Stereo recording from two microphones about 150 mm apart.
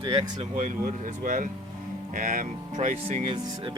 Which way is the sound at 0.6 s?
60° right (ahead or behind).